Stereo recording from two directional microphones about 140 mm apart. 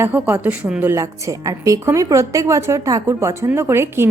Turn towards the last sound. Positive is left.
turn(degrees=-20)  # may be behind; listen again after turning